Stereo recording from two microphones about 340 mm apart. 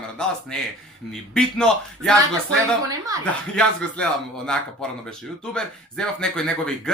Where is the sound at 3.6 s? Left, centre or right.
Centre.